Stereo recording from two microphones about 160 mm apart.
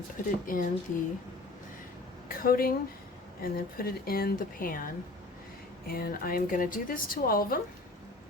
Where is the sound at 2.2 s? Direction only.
65° left (ahead or behind).